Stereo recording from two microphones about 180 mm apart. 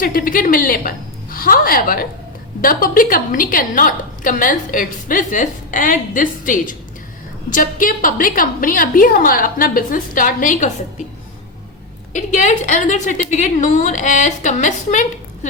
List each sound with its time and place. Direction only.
0.0 s a woman's voice: 50° left (ahead or behind)
12.1 s a woman's voice: 45° left (ahead or behind)